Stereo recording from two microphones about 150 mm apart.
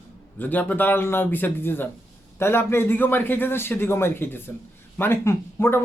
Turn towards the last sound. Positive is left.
turn(degrees=15)  # may be behind; listen again after turning